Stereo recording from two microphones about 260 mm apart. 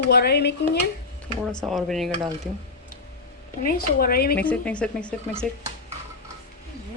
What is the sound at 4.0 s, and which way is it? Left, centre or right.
Speech, left.